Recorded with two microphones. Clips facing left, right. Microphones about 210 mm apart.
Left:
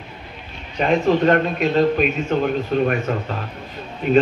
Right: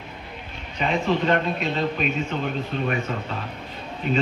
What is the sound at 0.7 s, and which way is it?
A man's voice, 50° left (ahead or behind).